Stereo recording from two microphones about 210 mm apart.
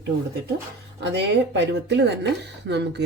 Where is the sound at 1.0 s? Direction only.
55° right (ahead or behind).